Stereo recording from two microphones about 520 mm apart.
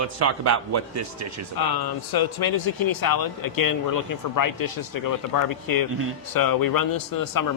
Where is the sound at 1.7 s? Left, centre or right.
Left.